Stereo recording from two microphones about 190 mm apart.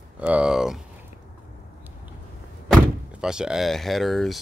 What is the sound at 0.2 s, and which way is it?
Speech, 5° right (ahead or behind).